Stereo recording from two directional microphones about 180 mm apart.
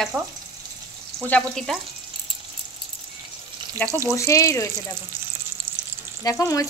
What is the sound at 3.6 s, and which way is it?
Frying, 25° right (ahead or behind).